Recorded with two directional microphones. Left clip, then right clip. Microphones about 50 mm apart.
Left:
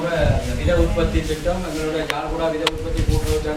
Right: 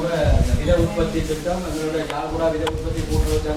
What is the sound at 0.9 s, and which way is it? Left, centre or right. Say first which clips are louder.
A man's voice: left 1 dB; left.